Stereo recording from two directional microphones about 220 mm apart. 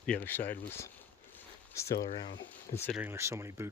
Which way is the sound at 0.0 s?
5° left (ahead or behind).